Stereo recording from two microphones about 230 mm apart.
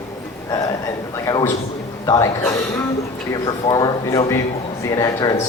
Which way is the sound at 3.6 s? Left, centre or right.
Centre.